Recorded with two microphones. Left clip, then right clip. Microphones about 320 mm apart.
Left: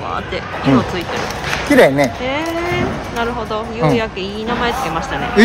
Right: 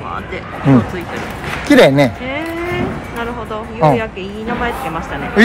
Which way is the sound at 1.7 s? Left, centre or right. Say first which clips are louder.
Right 2 dB; right.